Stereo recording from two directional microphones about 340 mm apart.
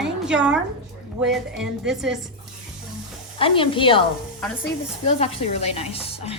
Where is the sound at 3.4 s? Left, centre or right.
Centre.